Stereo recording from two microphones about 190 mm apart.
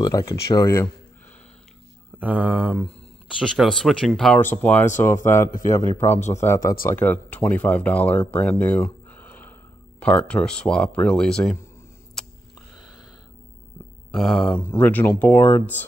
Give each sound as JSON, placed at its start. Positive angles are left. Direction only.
{"t": 0.0, "sound": "speech", "side_deg": 15}
{"t": 2.1, "sound": "mantra", "side_deg": -10}
{"t": 3.3, "sound": "speech", "side_deg": 0}
{"t": 14.1, "sound": "speech", "side_deg": 0}